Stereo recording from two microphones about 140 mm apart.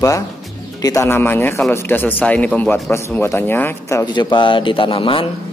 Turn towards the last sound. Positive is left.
turn(degrees=40)  # may be behind; listen again after turning